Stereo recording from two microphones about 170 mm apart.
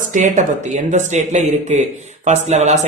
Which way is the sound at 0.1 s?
45° right (ahead or behind).